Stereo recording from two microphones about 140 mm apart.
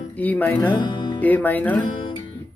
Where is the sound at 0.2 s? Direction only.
10° left (ahead or behind).